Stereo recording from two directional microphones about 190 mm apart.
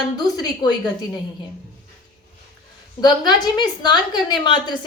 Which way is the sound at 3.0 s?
20° left (ahead or behind).